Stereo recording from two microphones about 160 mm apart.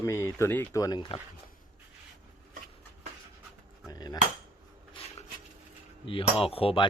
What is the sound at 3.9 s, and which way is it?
Cutlery, 25° left (ahead or behind).